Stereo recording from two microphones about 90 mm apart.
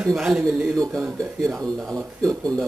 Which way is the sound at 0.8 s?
35° right (ahead or behind).